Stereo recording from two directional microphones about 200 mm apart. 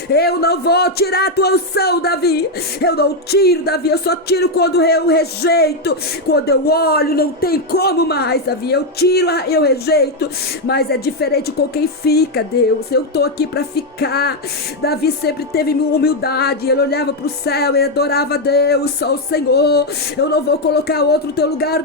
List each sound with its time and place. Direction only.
0.1 s speech: 50° left (ahead or behind)